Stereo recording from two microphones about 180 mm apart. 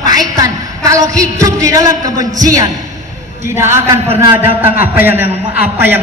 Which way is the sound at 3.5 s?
15° right (ahead or behind).